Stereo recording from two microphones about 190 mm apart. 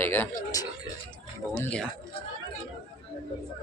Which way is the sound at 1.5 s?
5° left (ahead or behind).